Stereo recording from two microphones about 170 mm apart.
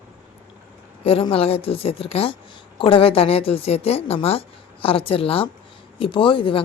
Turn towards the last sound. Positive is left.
turn(degrees=30)  # may be behind; listen again after turning